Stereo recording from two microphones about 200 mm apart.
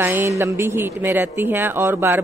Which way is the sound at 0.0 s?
10° right (ahead or behind).